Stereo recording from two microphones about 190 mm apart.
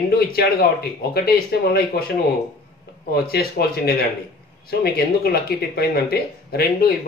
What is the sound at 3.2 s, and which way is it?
A man's voice, 55° left (ahead or behind).